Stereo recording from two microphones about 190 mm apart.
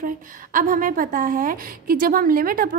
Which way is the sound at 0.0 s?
45° right (ahead or behind).